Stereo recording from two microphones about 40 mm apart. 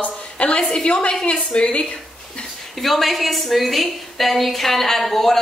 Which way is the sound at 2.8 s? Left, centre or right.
Centre.